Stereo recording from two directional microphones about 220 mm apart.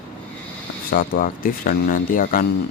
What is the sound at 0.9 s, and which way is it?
Speech, 40° left (ahead or behind).